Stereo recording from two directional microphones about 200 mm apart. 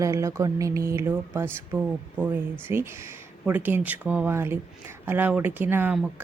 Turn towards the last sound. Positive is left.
turn(degrees=-10)  # may be behind; listen again after turning